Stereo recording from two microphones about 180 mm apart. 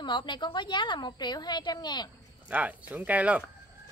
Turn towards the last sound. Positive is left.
turn(degrees=-10)  # may be behind; listen again after turning